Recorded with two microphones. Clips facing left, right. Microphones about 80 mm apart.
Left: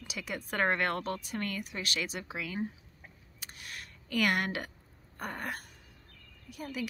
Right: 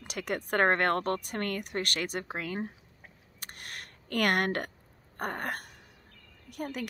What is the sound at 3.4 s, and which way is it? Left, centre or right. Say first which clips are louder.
Camera: right 2 dB; right.